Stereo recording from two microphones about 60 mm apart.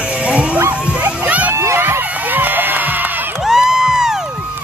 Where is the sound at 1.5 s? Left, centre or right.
Right.